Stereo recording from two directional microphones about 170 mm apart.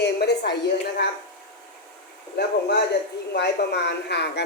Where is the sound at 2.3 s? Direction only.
75° left (ahead or behind).